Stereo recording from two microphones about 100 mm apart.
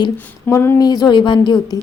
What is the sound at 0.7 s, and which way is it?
Speech, 40° left (ahead or behind).